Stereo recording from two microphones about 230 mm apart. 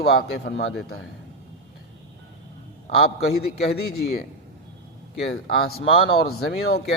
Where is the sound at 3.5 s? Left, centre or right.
Left.